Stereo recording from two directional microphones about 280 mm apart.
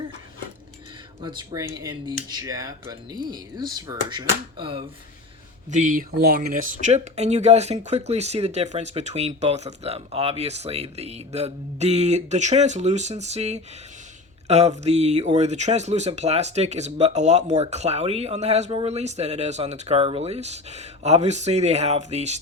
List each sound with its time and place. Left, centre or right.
1.2 s speech: centre
5.7 s speech: right